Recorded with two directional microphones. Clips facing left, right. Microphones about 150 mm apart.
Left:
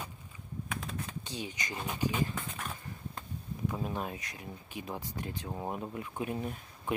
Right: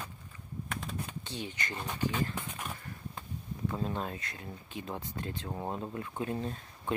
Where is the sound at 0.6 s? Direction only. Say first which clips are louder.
Even; centre (ahead or behind).